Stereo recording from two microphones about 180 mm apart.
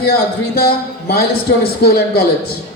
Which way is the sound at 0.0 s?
60° left (ahead or behind).